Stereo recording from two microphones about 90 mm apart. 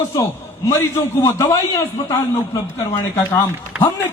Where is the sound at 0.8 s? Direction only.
35° left (ahead or behind).